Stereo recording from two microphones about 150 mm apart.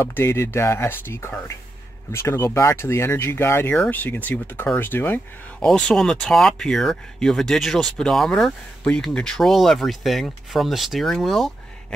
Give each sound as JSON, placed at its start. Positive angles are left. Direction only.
{"t": 0.0, "sound": "speech", "side_deg": 15}